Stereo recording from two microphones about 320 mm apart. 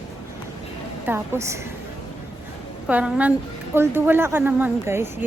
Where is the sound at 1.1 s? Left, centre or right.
Centre.